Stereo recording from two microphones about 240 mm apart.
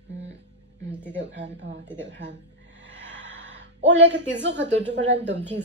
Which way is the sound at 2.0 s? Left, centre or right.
Right.